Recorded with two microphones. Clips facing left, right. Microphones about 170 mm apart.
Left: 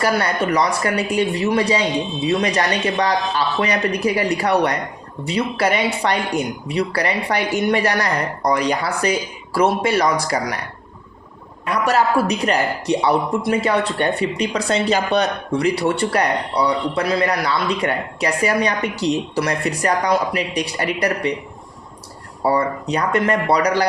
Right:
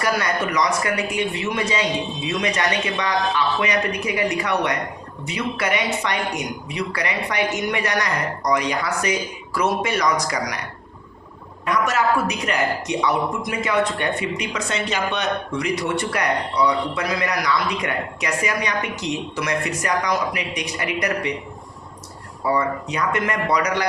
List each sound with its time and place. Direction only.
0.0 s a woman's voice: 30° left (ahead or behind)
11.6 s a woman's voice: 35° left (ahead or behind)
22.4 s a woman's voice: 35° left (ahead or behind)